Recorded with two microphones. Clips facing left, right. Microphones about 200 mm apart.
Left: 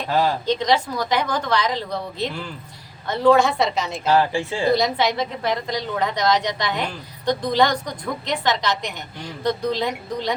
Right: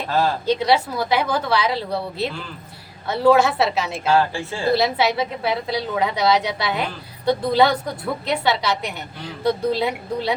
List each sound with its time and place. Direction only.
0.4 s a woman's voice: 10° right (ahead or behind)
4.1 s speech: 15° left (ahead or behind)
4.7 s a woman's voice: 5° right (ahead or behind)